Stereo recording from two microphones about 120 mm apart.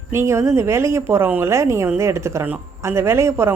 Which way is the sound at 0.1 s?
20° right (ahead or behind).